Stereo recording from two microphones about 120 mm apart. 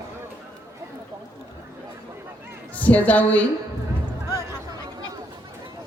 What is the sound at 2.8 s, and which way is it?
Speech, 15° left (ahead or behind).